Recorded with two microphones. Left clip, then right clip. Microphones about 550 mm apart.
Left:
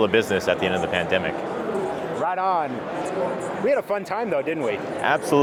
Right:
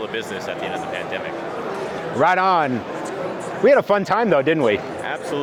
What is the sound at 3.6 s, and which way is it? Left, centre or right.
Speech, right.